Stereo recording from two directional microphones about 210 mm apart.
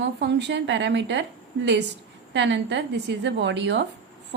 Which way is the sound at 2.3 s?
55° right (ahead or behind).